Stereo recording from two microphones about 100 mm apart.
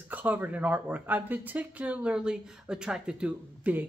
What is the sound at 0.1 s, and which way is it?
Speech, 15° right (ahead or behind).